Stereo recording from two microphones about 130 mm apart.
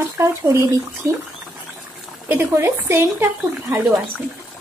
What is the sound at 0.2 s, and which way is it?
Speech, 20° right (ahead or behind).